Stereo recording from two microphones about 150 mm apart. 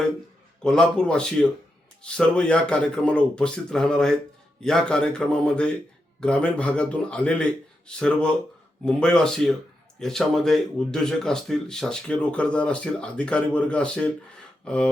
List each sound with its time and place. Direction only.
0.6 s speech: 5° left (ahead or behind)
14.6 s rub: 5° left (ahead or behind)